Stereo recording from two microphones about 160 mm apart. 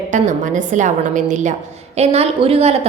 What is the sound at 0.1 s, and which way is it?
A woman's voice, 50° right (ahead or behind).